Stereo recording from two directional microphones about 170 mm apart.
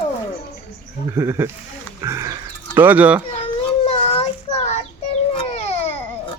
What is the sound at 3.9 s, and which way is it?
Child singing, 35° left (ahead or behind).